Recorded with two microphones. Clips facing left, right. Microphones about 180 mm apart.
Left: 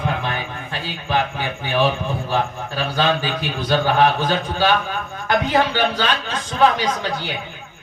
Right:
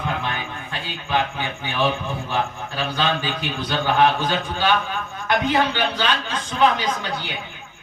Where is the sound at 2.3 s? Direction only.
40° left (ahead or behind).